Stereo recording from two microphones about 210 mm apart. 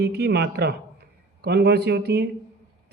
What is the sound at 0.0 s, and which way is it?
Speech, 50° right (ahead or behind).